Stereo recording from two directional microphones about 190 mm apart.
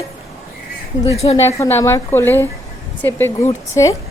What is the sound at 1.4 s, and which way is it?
A woman's voice, 15° left (ahead or behind).